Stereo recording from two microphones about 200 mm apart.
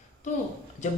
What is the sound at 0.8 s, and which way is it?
Speech, 35° left (ahead or behind).